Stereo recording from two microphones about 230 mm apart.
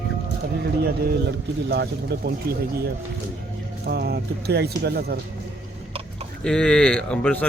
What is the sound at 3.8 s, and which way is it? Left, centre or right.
Speech, right.